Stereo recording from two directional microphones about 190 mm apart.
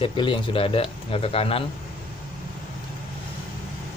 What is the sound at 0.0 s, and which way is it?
Speech, 25° left (ahead or behind).